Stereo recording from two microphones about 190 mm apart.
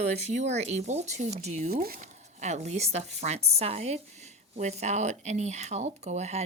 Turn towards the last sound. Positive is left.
turn(degrees=-35)  # may be behind; listen again after turning